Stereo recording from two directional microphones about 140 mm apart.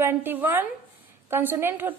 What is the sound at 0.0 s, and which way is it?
A woman's voice, 15° right (ahead or behind).